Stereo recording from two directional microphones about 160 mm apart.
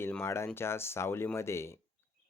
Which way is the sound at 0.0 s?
15° left (ahead or behind).